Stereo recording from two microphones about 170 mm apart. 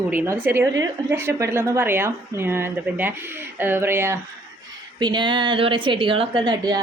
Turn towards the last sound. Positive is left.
turn(degrees=-25)  # may be behind; listen again after turning